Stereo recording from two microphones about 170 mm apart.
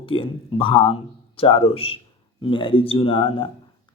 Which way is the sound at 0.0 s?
30° left (ahead or behind).